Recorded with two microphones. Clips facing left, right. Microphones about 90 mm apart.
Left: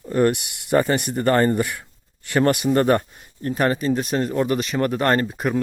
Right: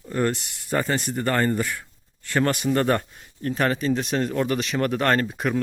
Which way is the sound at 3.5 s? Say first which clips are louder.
Left 3 dB; 5° left (ahead or behind).